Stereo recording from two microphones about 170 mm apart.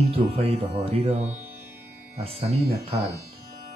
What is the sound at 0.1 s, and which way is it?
Speech, 35° right (ahead or behind).